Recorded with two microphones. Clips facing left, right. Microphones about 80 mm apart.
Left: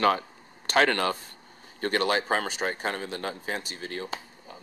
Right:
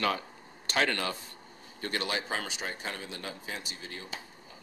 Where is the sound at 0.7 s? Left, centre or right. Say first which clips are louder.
Left 7 dB; left.